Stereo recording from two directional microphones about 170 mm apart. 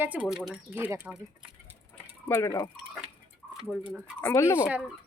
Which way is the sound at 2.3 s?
15° left (ahead or behind).